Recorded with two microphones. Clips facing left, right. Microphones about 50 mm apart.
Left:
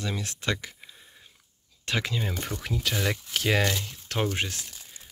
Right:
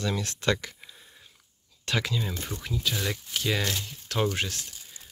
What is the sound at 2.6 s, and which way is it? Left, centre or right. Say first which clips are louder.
Speech: left 1 dB; left.